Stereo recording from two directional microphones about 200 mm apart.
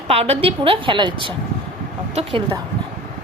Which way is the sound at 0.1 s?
30° right (ahead or behind).